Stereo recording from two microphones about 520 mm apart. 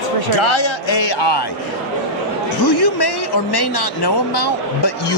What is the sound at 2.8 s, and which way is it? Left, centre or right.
Speech, left.